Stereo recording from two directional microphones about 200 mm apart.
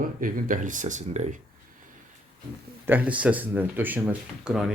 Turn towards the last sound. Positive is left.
turn(degrees=-5)  # may be behind; listen again after turning